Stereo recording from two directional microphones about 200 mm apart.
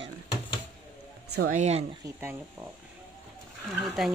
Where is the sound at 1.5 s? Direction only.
35° right (ahead or behind).